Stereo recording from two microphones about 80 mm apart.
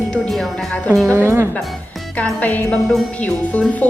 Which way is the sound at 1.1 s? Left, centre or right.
Right.